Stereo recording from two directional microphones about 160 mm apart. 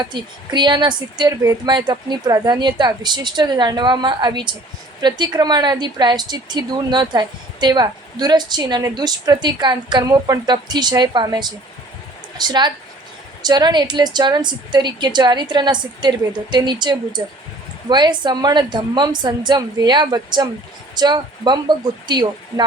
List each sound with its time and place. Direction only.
0.0 s a woman's voice: 30° right (ahead or behind)